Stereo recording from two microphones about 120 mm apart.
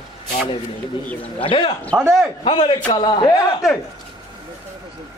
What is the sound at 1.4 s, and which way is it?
Speech, 45° left (ahead or behind).